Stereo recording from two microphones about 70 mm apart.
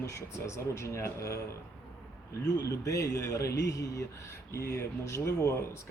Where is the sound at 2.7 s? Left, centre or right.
Left.